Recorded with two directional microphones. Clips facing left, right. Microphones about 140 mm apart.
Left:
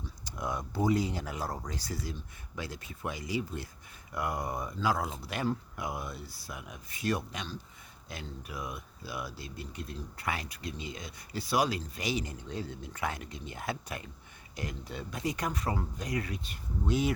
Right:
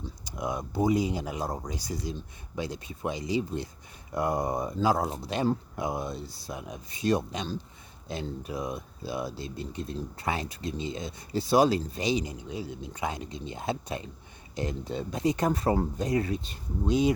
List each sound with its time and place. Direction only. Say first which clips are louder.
0.3 s speech: right 3 dB; 15° right (ahead or behind)